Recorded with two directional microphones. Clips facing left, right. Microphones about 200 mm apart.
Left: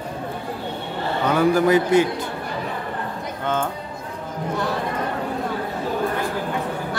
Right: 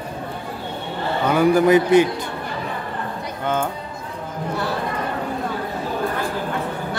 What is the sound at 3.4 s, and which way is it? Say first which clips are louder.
Speech: right 1 dB; 10° right (ahead or behind).